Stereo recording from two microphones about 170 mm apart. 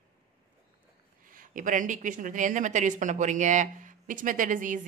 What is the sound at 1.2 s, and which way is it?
Speech, 50° right (ahead or behind).